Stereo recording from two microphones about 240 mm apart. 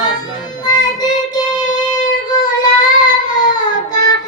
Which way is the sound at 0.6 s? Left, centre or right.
Centre.